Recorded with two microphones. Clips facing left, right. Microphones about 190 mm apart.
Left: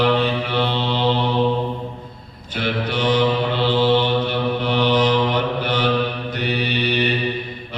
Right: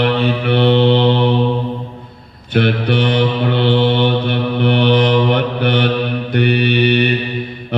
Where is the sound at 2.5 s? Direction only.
60° right (ahead or behind).